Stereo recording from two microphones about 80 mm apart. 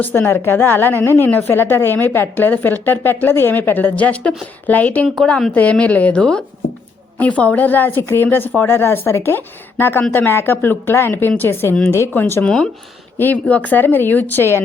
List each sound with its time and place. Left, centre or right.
0.0 s a woman's voice: left
5.0 s a woman's voice: centre
5.5 s a woman's voice: centre; by 12.4 s left
12.4 s a woman's voice: centre